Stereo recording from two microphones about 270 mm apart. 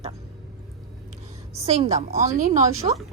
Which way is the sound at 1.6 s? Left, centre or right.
Right.